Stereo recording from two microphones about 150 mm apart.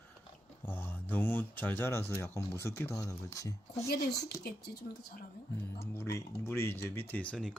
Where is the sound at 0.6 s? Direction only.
15° left (ahead or behind).